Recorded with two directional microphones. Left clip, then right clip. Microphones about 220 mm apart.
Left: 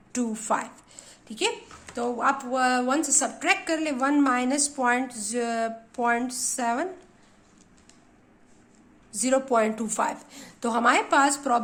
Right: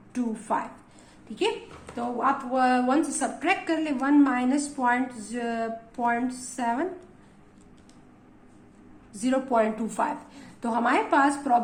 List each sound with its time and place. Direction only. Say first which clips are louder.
0.1 s speech: left 1 dB; 45° left (ahead or behind)
2.0 s a woman's voice: left 1 dB; 35° left (ahead or behind)
9.1 s a woman's voice: left 1 dB; 35° left (ahead or behind)